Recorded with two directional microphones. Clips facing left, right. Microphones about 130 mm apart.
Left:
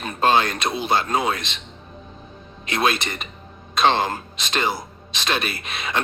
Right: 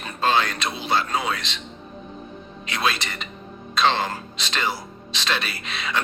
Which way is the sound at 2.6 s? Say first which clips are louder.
Left 4 dB; 50° left (ahead or behind).